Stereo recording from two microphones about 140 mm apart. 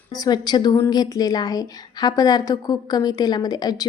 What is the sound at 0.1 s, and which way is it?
A woman's voice, 30° left (ahead or behind).